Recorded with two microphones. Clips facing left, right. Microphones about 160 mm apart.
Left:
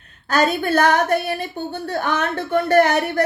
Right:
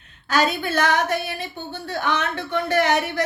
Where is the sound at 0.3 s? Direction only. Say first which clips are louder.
Left 4 dB; 50° left (ahead or behind).